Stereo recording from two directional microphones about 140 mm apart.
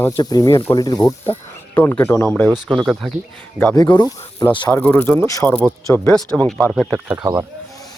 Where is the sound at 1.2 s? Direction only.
15° left (ahead or behind).